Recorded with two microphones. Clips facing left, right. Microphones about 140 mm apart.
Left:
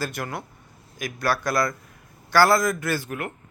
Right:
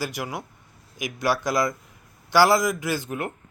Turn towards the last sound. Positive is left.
turn(degrees=-25)  # may be behind; listen again after turning